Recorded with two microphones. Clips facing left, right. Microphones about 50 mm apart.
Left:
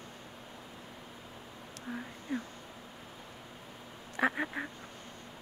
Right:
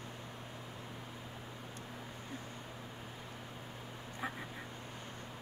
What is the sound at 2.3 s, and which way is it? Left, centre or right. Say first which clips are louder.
Speech: left 12 dB; left.